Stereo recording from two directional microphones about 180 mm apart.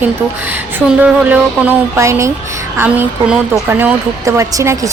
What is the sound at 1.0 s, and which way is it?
A woman's voice, 10° right (ahead or behind).